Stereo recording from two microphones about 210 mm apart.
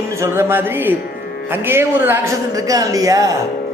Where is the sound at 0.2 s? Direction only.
10° right (ahead or behind).